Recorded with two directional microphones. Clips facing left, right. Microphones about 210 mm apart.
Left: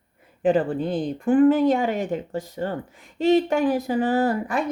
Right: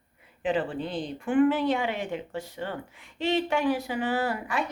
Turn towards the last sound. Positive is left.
turn(degrees=45)  # may be behind; listen again after turning